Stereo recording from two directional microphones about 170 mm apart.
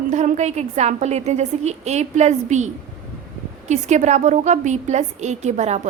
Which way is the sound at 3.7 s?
45° right (ahead or behind).